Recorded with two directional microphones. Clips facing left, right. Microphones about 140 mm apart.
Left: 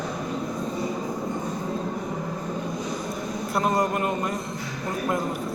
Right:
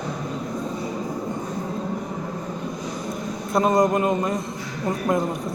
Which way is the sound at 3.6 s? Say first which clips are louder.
Right 5 dB; 15° right (ahead or behind).